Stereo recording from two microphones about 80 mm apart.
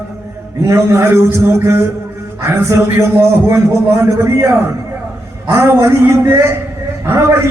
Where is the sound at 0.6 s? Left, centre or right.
Right.